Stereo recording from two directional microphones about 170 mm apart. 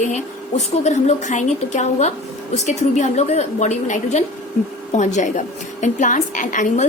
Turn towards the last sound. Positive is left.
turn(degrees=50)  # may be behind; listen again after turning